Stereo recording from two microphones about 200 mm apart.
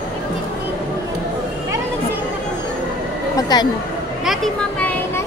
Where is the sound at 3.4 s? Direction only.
20° left (ahead or behind).